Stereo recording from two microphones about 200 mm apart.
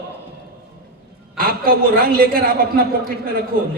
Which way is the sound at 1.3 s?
45° right (ahead or behind).